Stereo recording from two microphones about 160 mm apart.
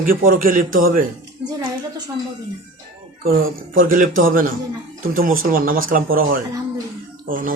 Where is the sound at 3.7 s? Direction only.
60° right (ahead or behind).